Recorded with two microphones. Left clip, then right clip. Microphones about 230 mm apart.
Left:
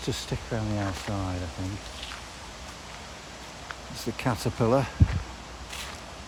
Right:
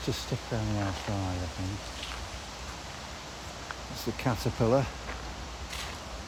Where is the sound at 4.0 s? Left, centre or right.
Centre.